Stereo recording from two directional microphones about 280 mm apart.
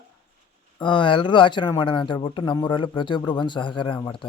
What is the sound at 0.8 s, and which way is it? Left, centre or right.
A man's voice, centre.